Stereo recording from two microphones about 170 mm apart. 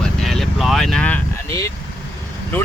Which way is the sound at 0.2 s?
Centre (ahead or behind).